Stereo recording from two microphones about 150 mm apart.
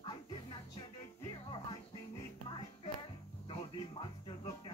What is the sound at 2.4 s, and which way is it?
Music, 35° left (ahead or behind).